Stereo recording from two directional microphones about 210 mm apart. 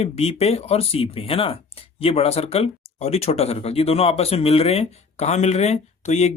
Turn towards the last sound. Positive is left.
turn(degrees=30)  # may be behind; listen again after turning